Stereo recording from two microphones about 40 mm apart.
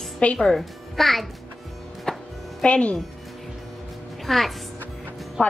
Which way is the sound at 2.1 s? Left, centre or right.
Centre.